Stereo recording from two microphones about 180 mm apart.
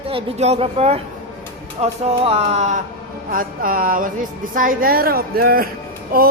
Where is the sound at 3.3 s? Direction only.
50° right (ahead or behind).